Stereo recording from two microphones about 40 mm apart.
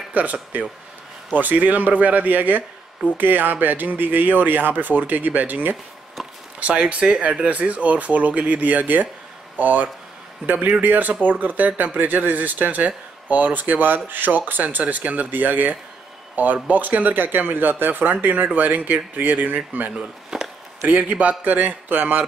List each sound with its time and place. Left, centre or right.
0.1 s speech: right
6.6 s speech: right
20.0 s chop: centre
21.0 s speech: right